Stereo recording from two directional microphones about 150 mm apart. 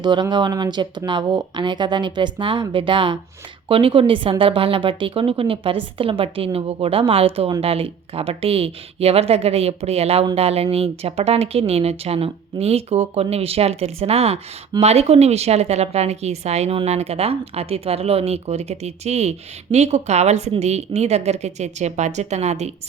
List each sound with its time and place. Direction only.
0.0 s a woman's voice: 30° right (ahead or behind); by 22.7 s 45° right (ahead or behind)